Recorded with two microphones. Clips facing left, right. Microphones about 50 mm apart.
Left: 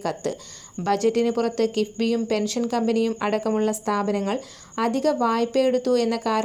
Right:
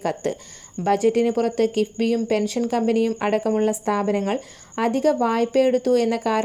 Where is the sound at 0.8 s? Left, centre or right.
Centre.